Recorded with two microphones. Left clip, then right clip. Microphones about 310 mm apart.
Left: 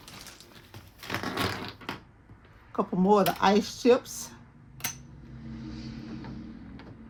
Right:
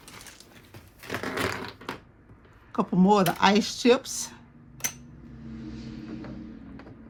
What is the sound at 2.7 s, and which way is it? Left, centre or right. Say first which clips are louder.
Speech: right 1 dB; right.